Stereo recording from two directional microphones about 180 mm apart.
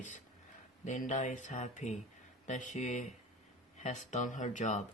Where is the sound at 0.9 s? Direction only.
40° left (ahead or behind).